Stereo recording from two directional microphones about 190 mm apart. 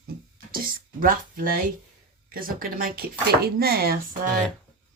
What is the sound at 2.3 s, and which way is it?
Speech, 50° right (ahead or behind).